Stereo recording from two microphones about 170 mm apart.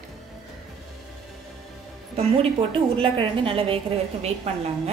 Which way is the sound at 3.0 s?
30° right (ahead or behind).